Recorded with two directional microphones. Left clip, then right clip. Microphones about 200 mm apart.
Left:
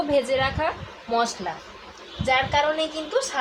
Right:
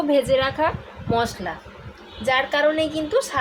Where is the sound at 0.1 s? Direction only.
35° right (ahead or behind).